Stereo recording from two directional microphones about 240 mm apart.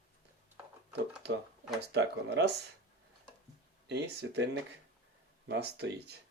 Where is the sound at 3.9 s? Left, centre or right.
Right.